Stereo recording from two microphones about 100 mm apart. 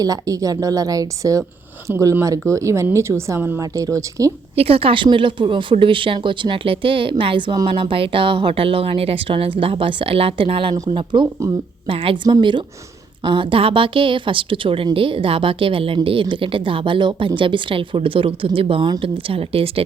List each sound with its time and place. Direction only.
0.0 s a woman's voice: 35° right (ahead or behind)
1.9 s a woman's voice: 20° right (ahead or behind)
2.2 s a woman's voice: 30° right (ahead or behind)
3.6 s a woman's voice: 35° right (ahead or behind)
4.5 s speech: 75° right (ahead or behind)
11.1 s a woman's voice: 55° right (ahead or behind)
11.9 s a woman's voice: 65° right (ahead or behind)